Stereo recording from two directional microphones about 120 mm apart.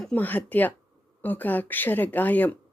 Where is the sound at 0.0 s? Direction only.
10° left (ahead or behind).